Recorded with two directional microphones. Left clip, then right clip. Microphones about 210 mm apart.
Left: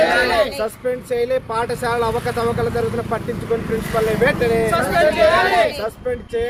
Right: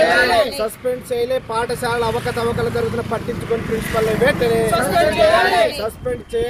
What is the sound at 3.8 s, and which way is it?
Speech, 25° left (ahead or behind).